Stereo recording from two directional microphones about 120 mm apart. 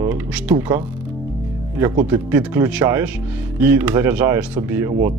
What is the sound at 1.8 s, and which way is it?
Speech, 20° right (ahead or behind).